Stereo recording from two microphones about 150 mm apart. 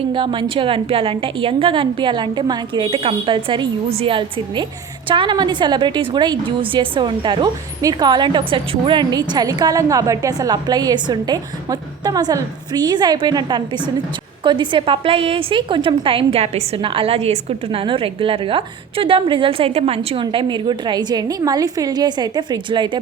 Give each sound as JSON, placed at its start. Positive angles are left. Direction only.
{"t": 0.1, "sound": "a woman's voice", "side_deg": -35}